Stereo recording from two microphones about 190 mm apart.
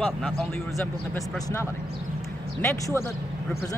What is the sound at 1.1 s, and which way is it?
Speech, 15° left (ahead or behind).